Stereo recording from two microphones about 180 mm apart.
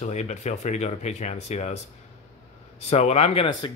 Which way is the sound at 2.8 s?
35° left (ahead or behind).